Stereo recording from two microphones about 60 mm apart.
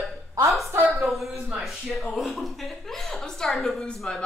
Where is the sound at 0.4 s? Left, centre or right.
Right.